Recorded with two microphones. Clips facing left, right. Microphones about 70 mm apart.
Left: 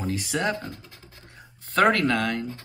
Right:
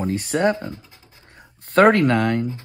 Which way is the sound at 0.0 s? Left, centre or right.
Right.